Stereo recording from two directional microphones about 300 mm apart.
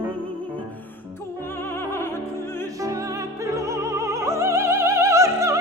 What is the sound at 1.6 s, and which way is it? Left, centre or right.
Music, centre.